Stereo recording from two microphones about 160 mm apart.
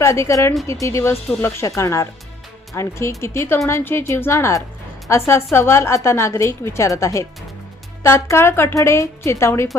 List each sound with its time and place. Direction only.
0.0 s a woman's voice: 20° left (ahead or behind)